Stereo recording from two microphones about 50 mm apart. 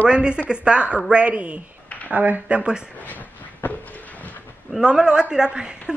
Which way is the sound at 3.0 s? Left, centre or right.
Left.